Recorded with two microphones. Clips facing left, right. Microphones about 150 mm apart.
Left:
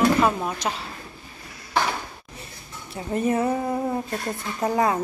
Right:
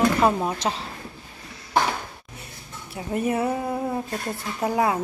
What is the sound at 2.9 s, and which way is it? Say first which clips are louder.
Speech: left 1 dB; 10° right (ahead or behind).